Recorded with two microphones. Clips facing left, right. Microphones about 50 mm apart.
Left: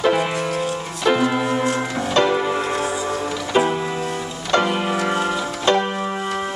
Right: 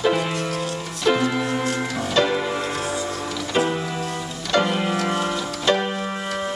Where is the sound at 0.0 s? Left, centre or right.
Centre.